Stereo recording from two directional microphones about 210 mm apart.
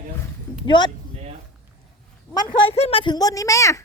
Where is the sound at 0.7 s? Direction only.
20° left (ahead or behind).